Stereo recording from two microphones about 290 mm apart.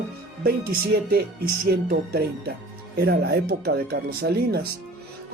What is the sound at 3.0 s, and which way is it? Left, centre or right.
Speech, right.